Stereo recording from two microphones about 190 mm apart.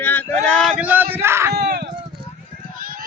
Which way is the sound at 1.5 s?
60° right (ahead or behind).